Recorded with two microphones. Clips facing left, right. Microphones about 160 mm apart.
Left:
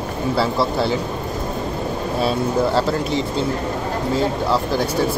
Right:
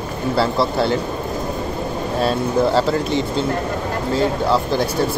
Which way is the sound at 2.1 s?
5° left (ahead or behind).